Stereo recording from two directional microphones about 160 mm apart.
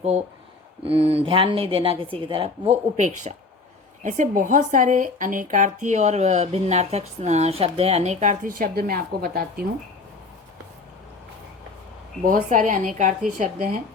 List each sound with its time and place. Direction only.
0.8 s a woman's voice: 35° right (ahead or behind)
4.0 s speech: 55° right (ahead or behind)
12.2 s speech: 60° right (ahead or behind)